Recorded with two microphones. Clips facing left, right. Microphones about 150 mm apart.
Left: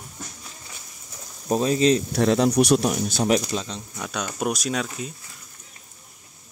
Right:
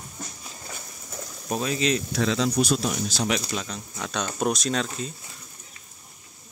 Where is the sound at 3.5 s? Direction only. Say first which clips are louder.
Left 3 dB; 30° left (ahead or behind).